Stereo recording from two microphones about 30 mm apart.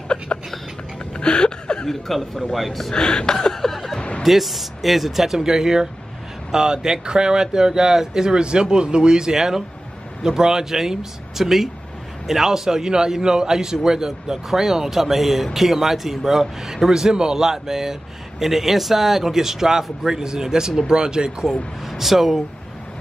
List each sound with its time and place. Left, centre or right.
0.3 s a sound: left
1.1 s a sound: left
1.9 s chuckle: centre
2.5 s speech: centre
2.9 s chuckle: left
3.7 s snicker: centre
4.2 s speech: centre
5.4 s speech: centre
9.3 s speech: centre
21.9 s speech: centre